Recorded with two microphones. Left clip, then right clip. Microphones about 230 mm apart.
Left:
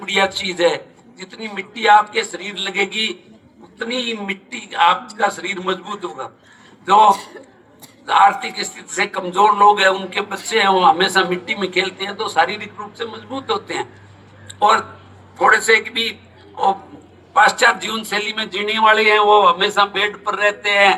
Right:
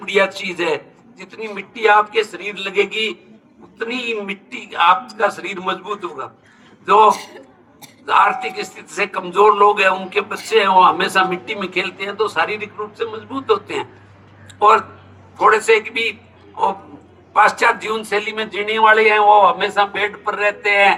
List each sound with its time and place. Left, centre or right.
0.0 s a man's voice: left
14.4 s a sound: left
15.4 s a man's voice: left
17.3 s a man's voice: left